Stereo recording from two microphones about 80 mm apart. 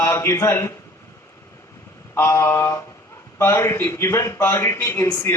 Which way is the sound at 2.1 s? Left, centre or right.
Left.